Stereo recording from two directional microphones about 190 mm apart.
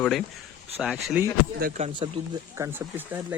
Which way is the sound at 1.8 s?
25° right (ahead or behind).